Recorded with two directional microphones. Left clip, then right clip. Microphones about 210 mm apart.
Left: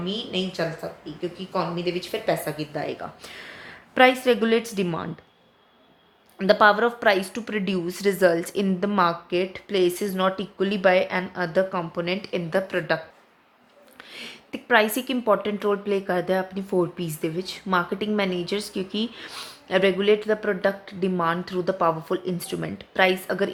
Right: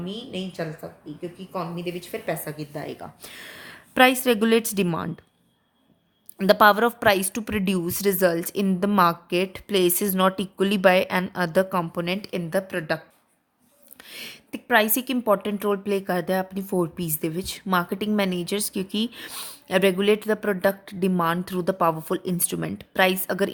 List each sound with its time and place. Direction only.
0.0 s speech: 25° right (ahead or behind)
6.4 s speech: 40° right (ahead or behind)
14.1 s speech: 35° right (ahead or behind)